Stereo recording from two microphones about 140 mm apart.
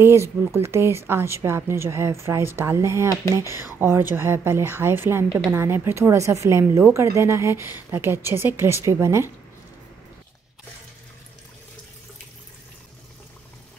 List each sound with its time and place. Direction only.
0.0 s a woman's voice: 20° right (ahead or behind)